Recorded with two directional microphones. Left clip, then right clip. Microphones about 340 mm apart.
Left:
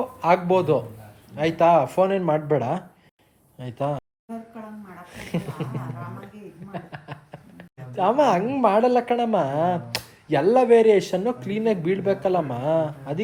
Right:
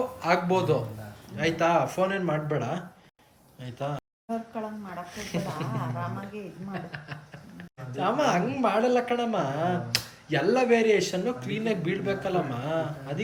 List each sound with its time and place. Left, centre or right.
0.2 s speech: centre
5.1 s speech: centre
6.7 s a sound: centre
7.9 s speech: centre